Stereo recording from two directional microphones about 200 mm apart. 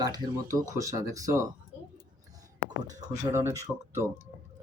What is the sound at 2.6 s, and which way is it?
Speech, 15° right (ahead or behind).